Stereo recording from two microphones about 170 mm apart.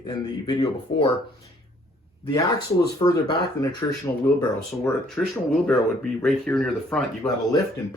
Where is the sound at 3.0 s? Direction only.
25° left (ahead or behind).